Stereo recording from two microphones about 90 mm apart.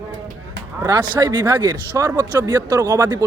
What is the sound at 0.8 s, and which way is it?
Speech, 50° right (ahead or behind).